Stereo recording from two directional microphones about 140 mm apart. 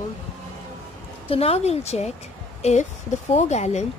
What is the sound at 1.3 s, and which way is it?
A woman's voice, 45° left (ahead or behind).